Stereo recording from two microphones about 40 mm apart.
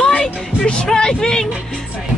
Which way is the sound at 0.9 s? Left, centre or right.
Centre.